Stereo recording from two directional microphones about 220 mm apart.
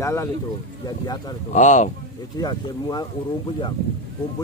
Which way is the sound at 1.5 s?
35° left (ahead or behind).